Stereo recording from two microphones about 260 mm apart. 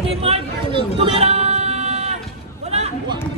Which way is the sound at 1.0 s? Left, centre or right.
Right.